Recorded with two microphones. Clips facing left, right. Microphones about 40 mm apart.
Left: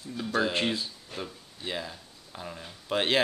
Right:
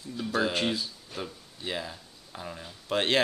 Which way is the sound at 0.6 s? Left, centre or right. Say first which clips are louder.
Even; centre.